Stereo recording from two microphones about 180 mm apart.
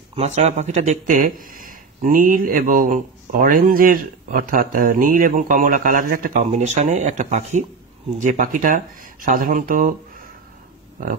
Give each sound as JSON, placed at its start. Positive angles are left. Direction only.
{"t": 0.1, "sound": "speech", "side_deg": -40}